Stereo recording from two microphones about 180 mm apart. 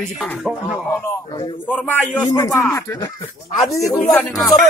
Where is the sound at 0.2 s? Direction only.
5° left (ahead or behind).